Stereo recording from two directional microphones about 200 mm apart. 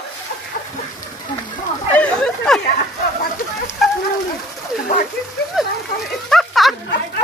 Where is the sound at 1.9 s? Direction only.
5° left (ahead or behind).